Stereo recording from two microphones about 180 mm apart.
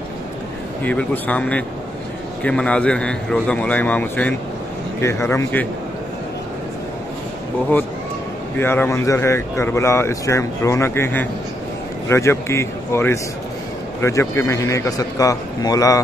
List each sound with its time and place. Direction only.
0.8 s speech: 10° left (ahead or behind)
8.5 s a man's voice: 10° left (ahead or behind)